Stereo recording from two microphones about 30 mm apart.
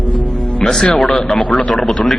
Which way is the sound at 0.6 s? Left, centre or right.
Centre.